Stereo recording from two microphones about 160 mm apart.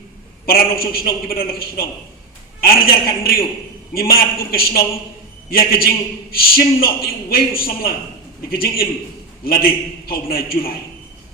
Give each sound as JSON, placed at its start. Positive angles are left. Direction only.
{"t": 0.4, "sound": "a man's voice", "side_deg": 70}